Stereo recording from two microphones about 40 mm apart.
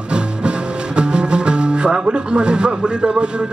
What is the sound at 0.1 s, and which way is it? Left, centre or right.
Music, right.